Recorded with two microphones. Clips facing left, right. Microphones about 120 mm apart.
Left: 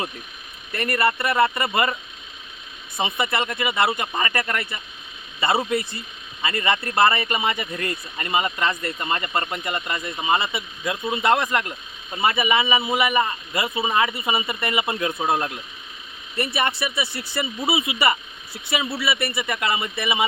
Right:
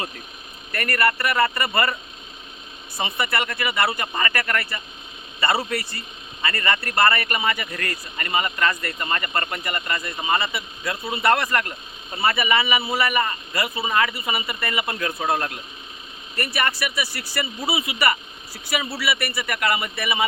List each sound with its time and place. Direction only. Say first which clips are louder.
0.7 s speech: left 1 dB; 20° left (ahead or behind)
3.0 s speech: left 1 dB; 20° left (ahead or behind)
16.5 s speech: even; 25° left (ahead or behind)